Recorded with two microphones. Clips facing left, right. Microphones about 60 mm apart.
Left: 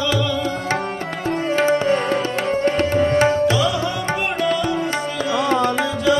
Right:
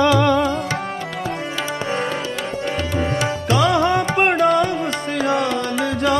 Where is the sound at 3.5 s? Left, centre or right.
Right.